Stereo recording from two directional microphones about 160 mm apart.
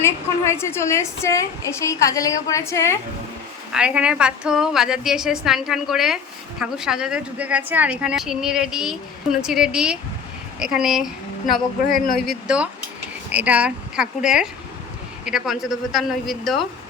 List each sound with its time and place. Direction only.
0.0 s a woman's voice: 15° left (ahead or behind)
3.7 s a woman's voice: 5° right (ahead or behind)